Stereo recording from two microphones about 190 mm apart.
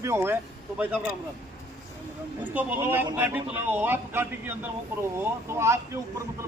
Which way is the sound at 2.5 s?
10° right (ahead or behind).